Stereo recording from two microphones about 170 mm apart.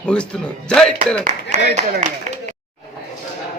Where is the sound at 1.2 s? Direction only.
40° right (ahead or behind).